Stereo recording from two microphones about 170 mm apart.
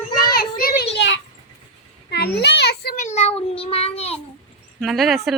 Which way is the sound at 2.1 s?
75° left (ahead or behind).